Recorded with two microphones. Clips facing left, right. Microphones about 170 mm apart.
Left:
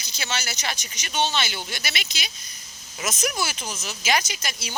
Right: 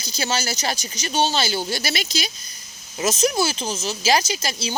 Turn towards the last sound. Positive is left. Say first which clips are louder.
# right 8 dB
turn(degrees=-30)  # may be behind; listen again after turning